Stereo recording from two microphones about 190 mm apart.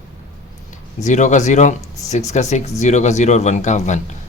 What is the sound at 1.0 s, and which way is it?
Speech, 40° left (ahead or behind).